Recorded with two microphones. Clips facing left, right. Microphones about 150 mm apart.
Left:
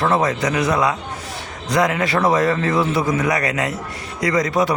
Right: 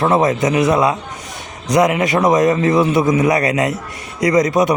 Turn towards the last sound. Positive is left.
turn(degrees=-20)  # may be behind; listen again after turning